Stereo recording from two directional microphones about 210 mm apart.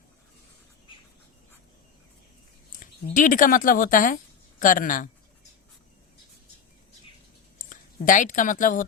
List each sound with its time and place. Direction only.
2.8 s speech: 40° left (ahead or behind)
7.7 s speech: 40° left (ahead or behind)